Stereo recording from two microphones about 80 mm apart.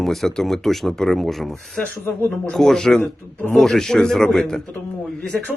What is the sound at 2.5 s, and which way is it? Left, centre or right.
Speech, centre.